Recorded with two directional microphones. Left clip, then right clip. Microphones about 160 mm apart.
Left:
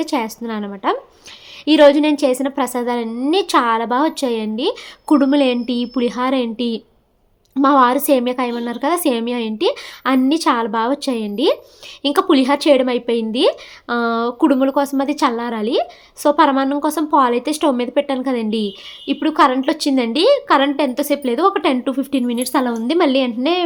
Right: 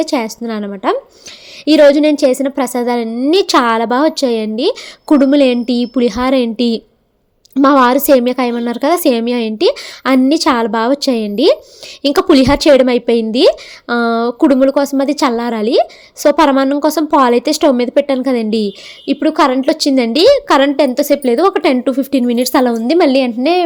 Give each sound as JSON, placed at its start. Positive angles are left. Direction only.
{"t": 0.0, "sound": "a woman's voice", "side_deg": -25}